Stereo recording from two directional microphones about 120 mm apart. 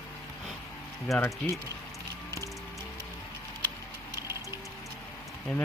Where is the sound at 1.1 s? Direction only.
Centre (ahead or behind).